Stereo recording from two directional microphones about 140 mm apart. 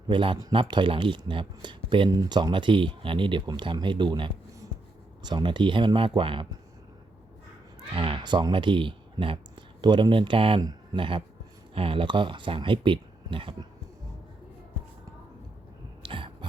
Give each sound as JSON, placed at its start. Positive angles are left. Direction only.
{"t": 0.1, "sound": "speech", "side_deg": -35}
{"t": 7.9, "sound": "speech", "side_deg": -40}
{"t": 16.0, "sound": "a sound", "side_deg": -40}